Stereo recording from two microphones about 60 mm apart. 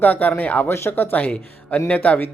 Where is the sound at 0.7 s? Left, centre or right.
Left.